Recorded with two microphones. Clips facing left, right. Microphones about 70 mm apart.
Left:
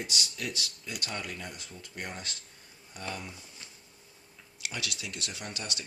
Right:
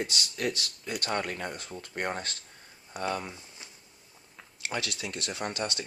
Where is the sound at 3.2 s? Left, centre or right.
Right.